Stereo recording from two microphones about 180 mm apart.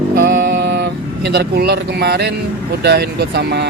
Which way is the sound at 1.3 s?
65° right (ahead or behind).